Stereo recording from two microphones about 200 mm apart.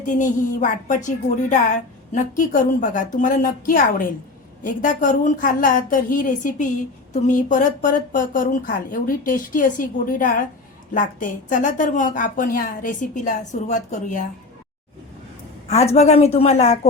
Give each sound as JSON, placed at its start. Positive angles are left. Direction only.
{"t": 0.0, "sound": "a woman's voice", "side_deg": 40}
{"t": 15.6, "sound": "a woman's voice", "side_deg": 35}